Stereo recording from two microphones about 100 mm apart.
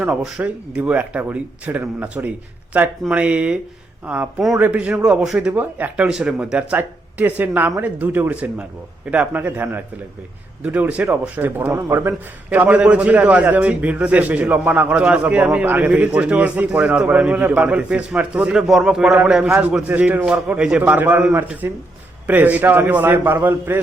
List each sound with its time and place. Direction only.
0.3 s a man's voice: 15° right (ahead or behind)
12.5 s a man's voice: 15° right (ahead or behind)